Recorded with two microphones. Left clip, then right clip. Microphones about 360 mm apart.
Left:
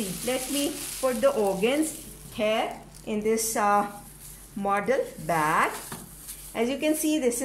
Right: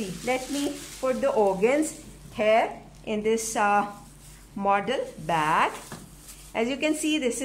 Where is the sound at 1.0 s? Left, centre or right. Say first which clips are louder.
Right 1 dB; centre.